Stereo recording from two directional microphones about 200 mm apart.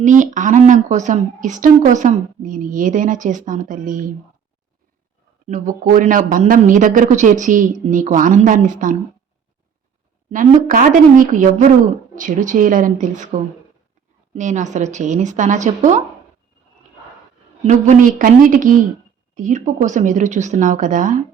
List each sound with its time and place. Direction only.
0.0 s a woman's voice: 40° right (ahead or behind)
5.5 s a woman's voice: 40° right (ahead or behind)
10.3 s a woman's voice: 40° right (ahead or behind)
14.3 s a woman's voice: 35° right (ahead or behind)
17.6 s a woman's voice: 35° right (ahead or behind)